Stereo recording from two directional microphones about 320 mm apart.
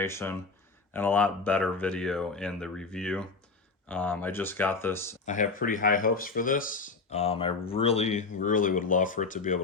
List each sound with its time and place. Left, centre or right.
0.0 s speech: centre
5.2 s speech: left